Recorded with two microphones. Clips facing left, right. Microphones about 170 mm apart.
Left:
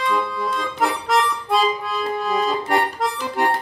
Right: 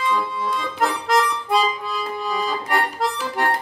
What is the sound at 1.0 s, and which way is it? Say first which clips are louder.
Music: even; centre (ahead or behind).